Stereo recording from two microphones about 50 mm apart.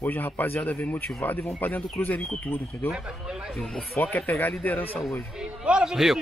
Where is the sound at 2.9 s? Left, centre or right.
Centre.